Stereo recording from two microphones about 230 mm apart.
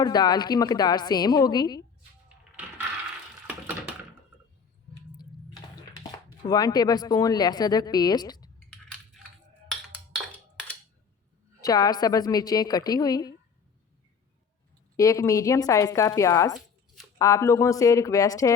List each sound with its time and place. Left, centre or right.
0.0 s a woman's voice: centre
6.0 s speech: centre
11.6 s a woman's voice: centre
14.9 s a woman's voice: centre
16.6 s a sound: centre
17.2 s a woman's voice: centre